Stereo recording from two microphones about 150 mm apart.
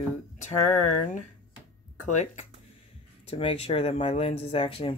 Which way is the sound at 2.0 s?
50° left (ahead or behind).